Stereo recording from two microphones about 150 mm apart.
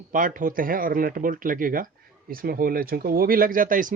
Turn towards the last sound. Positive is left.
turn(degrees=-65)  # may be behind; listen again after turning